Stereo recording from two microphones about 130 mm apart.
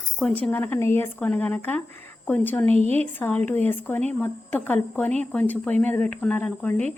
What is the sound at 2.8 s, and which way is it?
Speech, 55° right (ahead or behind).